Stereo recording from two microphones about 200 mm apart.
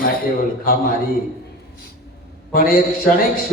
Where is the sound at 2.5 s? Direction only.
45° left (ahead or behind).